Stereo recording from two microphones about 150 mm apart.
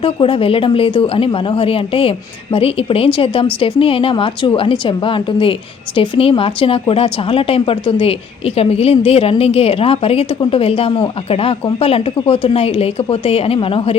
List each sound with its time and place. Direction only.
0.0 s a woman's voice: 35° left (ahead or behind)